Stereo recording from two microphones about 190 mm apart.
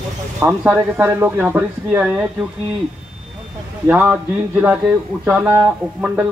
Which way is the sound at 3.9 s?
10° right (ahead or behind).